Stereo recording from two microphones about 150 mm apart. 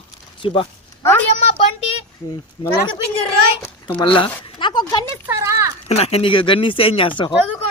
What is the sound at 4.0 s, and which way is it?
Speech, 35° left (ahead or behind).